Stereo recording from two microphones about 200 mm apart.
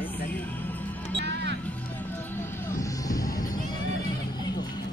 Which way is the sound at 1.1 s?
60° right (ahead or behind).